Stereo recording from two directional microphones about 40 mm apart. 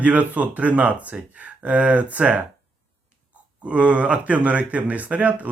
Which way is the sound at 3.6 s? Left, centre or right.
Right.